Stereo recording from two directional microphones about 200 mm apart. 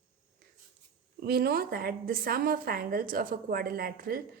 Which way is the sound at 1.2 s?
50° right (ahead or behind).